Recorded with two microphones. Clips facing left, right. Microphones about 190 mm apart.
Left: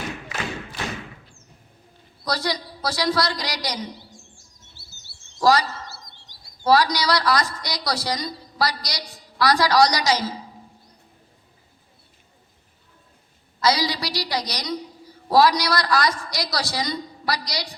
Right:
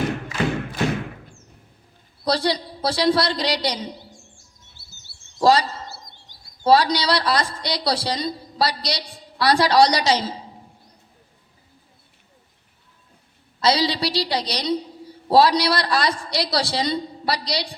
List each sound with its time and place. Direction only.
0.0 s thump: 55° right (ahead or behind)
2.2 s a woman's voice: 30° right (ahead or behind)
5.4 s chirp: 25° right (ahead or behind)
6.7 s a woman's voice: 30° right (ahead or behind)
13.6 s a woman's voice: 30° right (ahead or behind)